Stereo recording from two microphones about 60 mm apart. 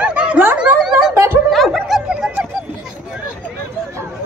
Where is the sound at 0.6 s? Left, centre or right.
Centre.